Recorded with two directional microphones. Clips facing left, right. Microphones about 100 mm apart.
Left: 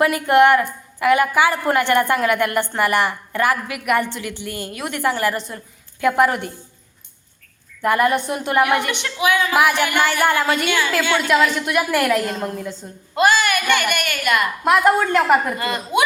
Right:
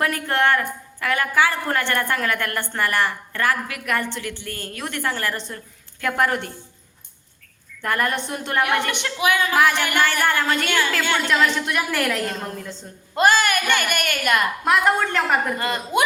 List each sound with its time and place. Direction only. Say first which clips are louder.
0.0 s a woman's voice: left 7 dB; 15° left (ahead or behind)
7.8 s a woman's voice: left 6 dB; 10° left (ahead or behind)
13.1 s speech: left 1 dB; 45° right (ahead or behind)
14.6 s a woman's voice: left 6 dB; 5° left (ahead or behind)
15.5 s a woman's voice: left 1 dB; 40° right (ahead or behind)